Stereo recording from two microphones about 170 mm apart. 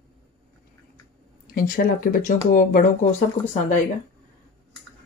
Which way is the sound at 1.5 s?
55° left (ahead or behind).